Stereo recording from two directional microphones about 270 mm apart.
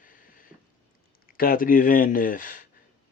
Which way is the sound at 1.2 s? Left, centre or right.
Left.